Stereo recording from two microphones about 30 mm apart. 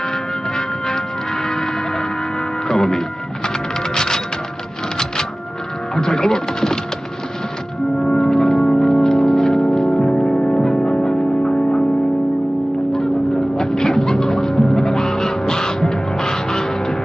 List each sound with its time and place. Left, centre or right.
0.6 s music: left
2.7 s music: centre
5.9 s speech: centre
8.0 s music: left
12.9 s music: centre